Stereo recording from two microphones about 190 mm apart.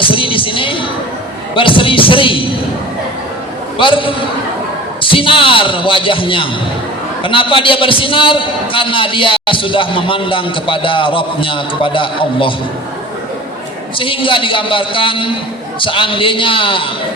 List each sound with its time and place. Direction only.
0.0 s music: 25° left (ahead or behind)
1.5 s a man's voice: 25° left (ahead or behind)
3.8 s a man's voice: 25° left (ahead or behind)
5.1 s a man's voice: 25° left (ahead or behind)
14.0 s a man's voice: 25° left (ahead or behind)